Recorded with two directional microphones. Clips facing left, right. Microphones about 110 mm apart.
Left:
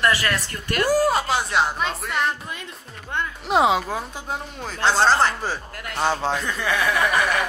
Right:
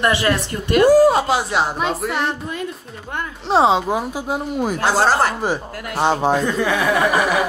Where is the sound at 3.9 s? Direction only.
15° right (ahead or behind).